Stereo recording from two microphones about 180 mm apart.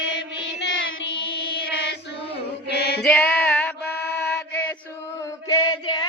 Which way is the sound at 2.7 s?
65° left (ahead or behind).